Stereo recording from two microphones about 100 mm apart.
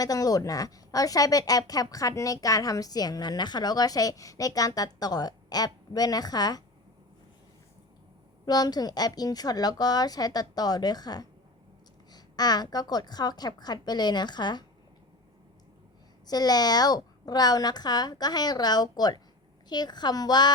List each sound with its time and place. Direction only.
0.0 s a woman's voice: 40° left (ahead or behind)
8.4 s a woman's voice: 40° left (ahead or behind)
16.2 s a woman's voice: 40° left (ahead or behind)